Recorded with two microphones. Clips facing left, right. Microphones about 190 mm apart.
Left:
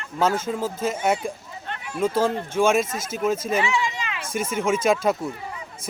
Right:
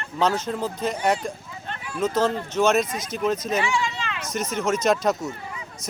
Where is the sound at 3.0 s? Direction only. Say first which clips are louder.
Left 1 dB; 45° left (ahead or behind).